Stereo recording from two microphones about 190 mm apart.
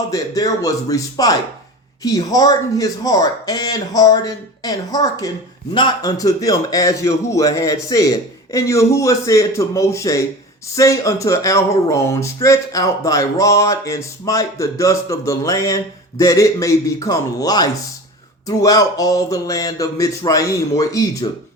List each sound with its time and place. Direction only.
0.1 s speech: 20° left (ahead or behind)